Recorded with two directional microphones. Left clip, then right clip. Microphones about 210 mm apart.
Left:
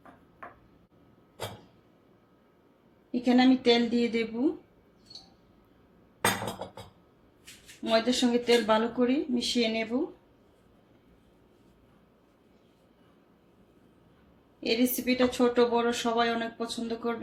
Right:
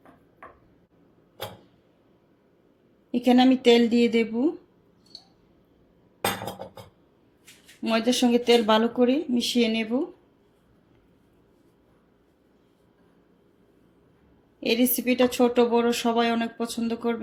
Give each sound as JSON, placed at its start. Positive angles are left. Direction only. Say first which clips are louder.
{"t": 3.1, "sound": "a woman's voice", "louder": "right 4 dB", "side_deg": -40}
{"t": 7.9, "sound": "a woman's voice", "louder": "right 3 dB", "side_deg": -35}
{"t": 14.6, "sound": "a woman's voice", "louder": "right 4 dB", "side_deg": -40}